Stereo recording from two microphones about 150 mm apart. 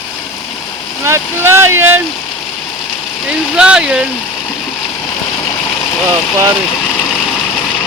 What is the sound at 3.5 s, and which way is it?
Speech, 5° right (ahead or behind).